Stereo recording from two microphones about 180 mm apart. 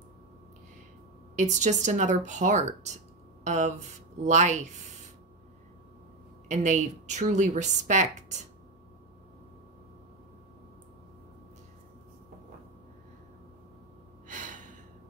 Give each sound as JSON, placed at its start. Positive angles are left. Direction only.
{"t": 1.3, "sound": "speech", "side_deg": -40}
{"t": 6.5, "sound": "speech", "side_deg": -40}
{"t": 14.2, "sound": "gasp", "side_deg": -45}